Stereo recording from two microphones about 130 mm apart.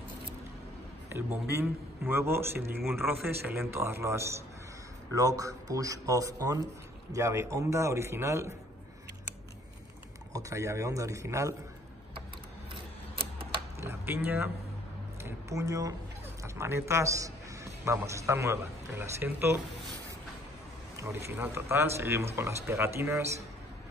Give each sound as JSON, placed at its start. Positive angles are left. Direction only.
{"t": 1.1, "sound": "a man's voice", "side_deg": -20}
{"t": 10.3, "sound": "a man's voice", "side_deg": -25}
{"t": 13.7, "sound": "a sound", "side_deg": -20}
{"t": 15.2, "sound": "a man's voice", "side_deg": -25}
{"t": 20.9, "sound": "a man's voice", "side_deg": -20}